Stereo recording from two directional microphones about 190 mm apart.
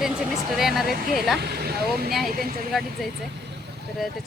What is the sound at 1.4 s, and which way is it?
Speech, 55° right (ahead or behind).